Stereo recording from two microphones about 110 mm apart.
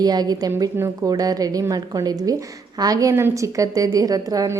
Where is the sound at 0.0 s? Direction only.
35° right (ahead or behind).